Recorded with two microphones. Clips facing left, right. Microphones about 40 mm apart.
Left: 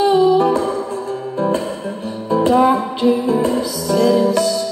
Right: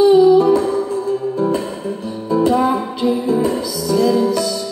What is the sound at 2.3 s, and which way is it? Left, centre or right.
Music, left.